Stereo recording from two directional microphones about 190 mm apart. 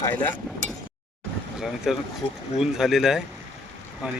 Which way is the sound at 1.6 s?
Centre (ahead or behind).